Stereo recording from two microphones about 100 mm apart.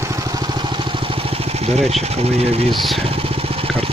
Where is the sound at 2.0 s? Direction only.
90° right.